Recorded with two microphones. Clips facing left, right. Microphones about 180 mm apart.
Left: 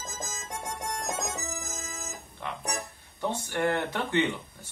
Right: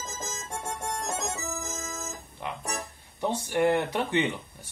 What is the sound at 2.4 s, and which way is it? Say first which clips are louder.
Speech: even; 15° right (ahead or behind).